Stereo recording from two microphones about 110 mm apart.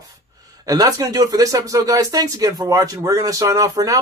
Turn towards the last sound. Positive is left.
turn(degrees=-35)  # may be behind; listen again after turning